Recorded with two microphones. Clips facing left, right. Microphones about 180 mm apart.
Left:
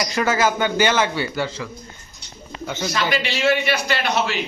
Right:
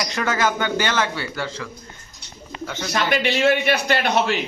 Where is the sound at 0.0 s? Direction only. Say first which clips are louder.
Left 2 dB; 5° left (ahead or behind).